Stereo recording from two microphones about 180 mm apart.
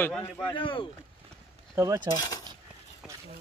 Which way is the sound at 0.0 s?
10° left (ahead or behind).